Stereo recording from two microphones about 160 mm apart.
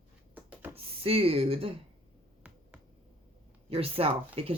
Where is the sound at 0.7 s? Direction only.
35° right (ahead or behind).